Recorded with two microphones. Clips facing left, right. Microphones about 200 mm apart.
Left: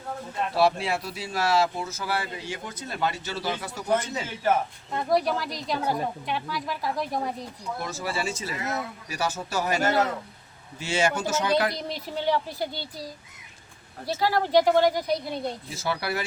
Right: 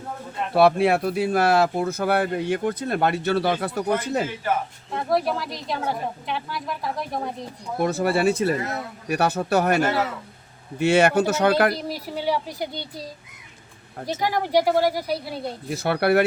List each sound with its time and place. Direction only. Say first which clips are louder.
0.5 s speech: right 7 dB; 60° right (ahead or behind)
4.9 s a woman's voice: right 1 dB; centre (ahead or behind)
7.8 s speech: right 11 dB; 60° right (ahead or behind)
11.7 s speech: right 3 dB; 5° right (ahead or behind)
14.1 s speech: even; 15° right (ahead or behind)
15.7 s speech: right 13 dB; 60° right (ahead or behind)